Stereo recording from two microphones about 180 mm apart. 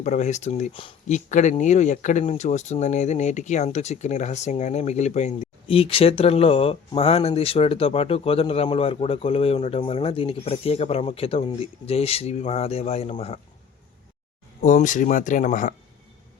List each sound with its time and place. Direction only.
0.0 s speech: 40° left (ahead or behind)
0.7 s speech: 30° left (ahead or behind)
14.6 s speech: 45° left (ahead or behind)